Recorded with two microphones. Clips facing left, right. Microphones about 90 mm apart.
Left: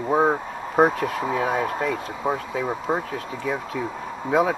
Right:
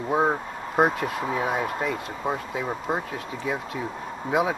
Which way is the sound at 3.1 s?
45° left (ahead or behind).